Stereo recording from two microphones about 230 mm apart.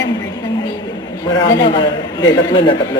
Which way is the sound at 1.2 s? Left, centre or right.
Centre.